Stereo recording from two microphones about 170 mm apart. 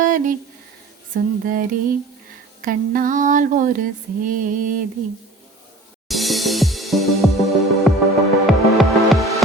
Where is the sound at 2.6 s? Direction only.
55° right (ahead or behind).